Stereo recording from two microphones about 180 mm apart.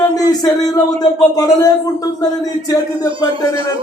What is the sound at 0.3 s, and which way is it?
Speech, 20° left (ahead or behind).